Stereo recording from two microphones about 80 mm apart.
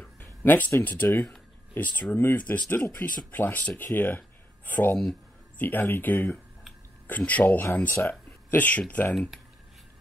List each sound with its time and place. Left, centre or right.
0.2 s speech: left